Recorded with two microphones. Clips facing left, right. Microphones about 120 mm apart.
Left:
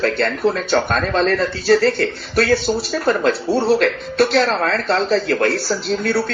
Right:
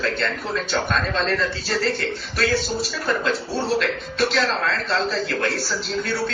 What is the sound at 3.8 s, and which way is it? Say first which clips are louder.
Speech: left 6 dB; 45° left (ahead or behind).